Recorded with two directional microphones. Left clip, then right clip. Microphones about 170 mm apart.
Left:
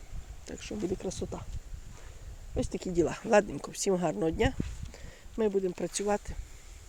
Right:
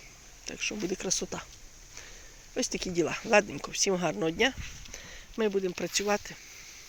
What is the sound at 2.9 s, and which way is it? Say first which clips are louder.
Speech: even; 25° left (ahead or behind).